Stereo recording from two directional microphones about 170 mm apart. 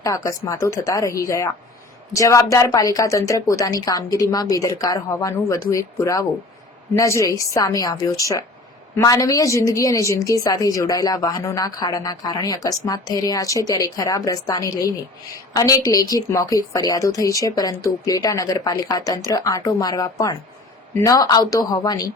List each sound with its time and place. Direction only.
0.0 s a woman's voice: 20° left (ahead or behind)